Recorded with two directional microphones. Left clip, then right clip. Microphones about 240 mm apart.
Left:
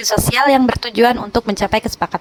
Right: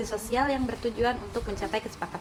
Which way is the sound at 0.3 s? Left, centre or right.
Left.